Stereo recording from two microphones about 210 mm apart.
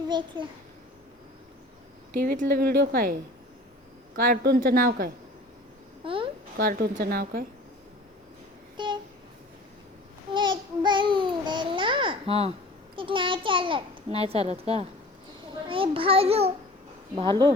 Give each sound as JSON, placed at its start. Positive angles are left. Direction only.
{"t": 0.1, "sound": "a child's voice", "side_deg": -25}
{"t": 2.1, "sound": "a woman's voice", "side_deg": -40}
{"t": 6.6, "sound": "a woman's voice", "side_deg": -45}
{"t": 8.8, "sound": "a sound", "side_deg": -20}
{"t": 10.3, "sound": "a child's voice", "side_deg": -20}